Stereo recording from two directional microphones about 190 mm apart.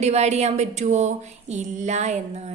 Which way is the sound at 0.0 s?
35° right (ahead or behind).